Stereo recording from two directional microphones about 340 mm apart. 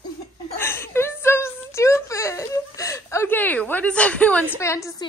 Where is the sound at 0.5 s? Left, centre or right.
Centre.